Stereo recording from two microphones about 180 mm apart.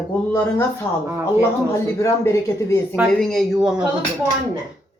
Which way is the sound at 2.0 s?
15° left (ahead or behind).